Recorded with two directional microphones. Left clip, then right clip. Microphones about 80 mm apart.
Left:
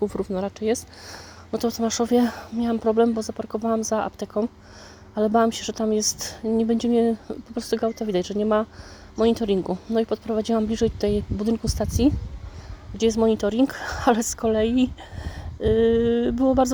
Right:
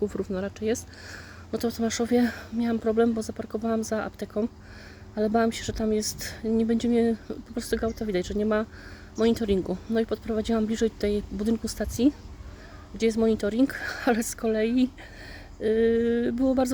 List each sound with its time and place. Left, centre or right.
0.1 s speech: left